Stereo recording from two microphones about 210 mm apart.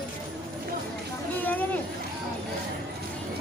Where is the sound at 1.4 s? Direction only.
10° left (ahead or behind).